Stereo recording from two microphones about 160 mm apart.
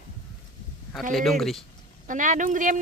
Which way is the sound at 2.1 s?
55° right (ahead or behind).